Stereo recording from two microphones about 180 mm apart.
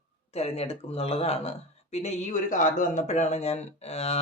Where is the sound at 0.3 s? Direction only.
35° left (ahead or behind).